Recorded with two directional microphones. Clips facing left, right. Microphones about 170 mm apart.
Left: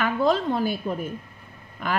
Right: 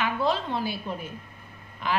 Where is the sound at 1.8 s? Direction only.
50° left (ahead or behind).